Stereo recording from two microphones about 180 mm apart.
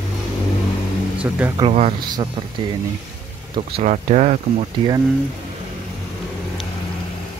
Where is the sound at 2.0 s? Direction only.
25° right (ahead or behind).